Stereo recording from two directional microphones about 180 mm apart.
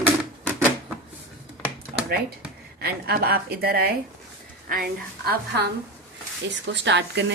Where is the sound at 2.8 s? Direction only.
60° right (ahead or behind).